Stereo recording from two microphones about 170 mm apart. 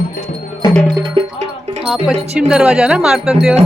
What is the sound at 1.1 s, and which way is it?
Music, 40° right (ahead or behind).